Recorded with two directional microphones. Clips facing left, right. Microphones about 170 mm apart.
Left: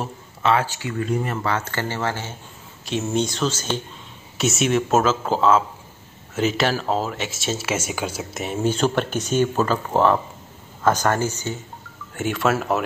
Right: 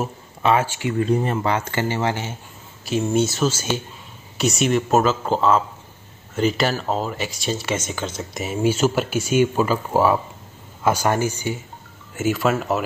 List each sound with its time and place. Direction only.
0.0 s speech: 15° right (ahead or behind)
2.8 s speech: centre (ahead or behind)
8.5 s speech: 5° right (ahead or behind)
12.2 s speech: centre (ahead or behind)